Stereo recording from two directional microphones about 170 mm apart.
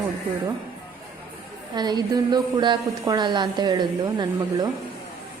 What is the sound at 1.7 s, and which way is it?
Speech, 25° right (ahead or behind).